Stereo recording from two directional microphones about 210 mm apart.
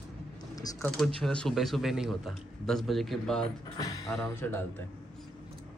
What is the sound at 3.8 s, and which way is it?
Mechanisms, 15° left (ahead or behind).